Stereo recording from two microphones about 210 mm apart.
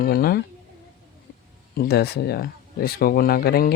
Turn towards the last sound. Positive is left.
turn(degrees=45)  # may be behind; listen again after turning